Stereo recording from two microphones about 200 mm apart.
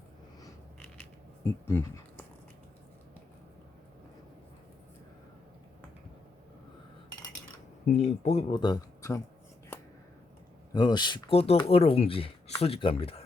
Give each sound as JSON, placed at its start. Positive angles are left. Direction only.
{"t": 1.6, "sound": "speech", "side_deg": 10}
{"t": 7.9, "sound": "speech", "side_deg": 35}
{"t": 10.7, "sound": "speech", "side_deg": 20}